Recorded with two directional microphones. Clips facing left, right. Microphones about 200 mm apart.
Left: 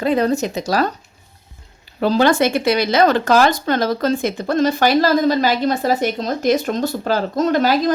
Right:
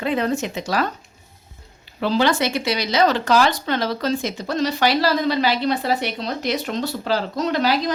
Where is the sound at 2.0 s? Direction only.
45° left (ahead or behind).